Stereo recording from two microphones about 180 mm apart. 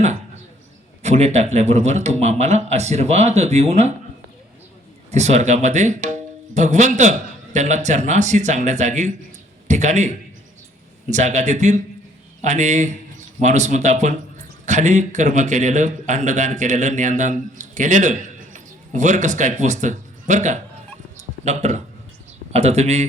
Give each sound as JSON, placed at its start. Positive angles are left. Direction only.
{"t": 1.0, "sound": "speech", "side_deg": -40}
{"t": 5.1, "sound": "speech", "side_deg": -40}
{"t": 21.2, "sound": "a sound", "side_deg": -40}
{"t": 22.5, "sound": "speech", "side_deg": -35}